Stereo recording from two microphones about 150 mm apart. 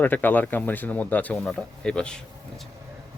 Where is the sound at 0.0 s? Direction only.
10° left (ahead or behind).